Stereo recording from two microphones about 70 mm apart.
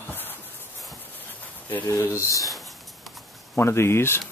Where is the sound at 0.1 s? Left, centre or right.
Left.